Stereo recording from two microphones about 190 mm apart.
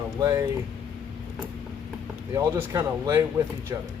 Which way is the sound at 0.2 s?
20° right (ahead or behind).